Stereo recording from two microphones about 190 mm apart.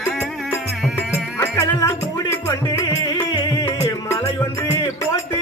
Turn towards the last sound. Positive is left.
turn(degrees=20)  # may be behind; listen again after turning